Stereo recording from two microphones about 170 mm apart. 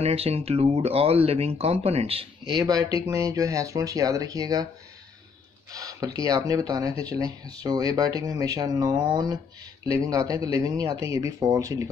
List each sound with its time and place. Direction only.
0.0 s speech: 35° right (ahead or behind); by 4.6 s 20° right (ahead or behind)
5.7 s speech: 20° right (ahead or behind)